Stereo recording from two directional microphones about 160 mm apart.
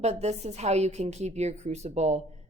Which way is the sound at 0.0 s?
45° right (ahead or behind).